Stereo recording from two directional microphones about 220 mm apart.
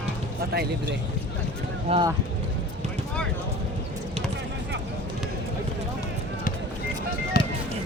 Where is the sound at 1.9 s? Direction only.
25° right (ahead or behind).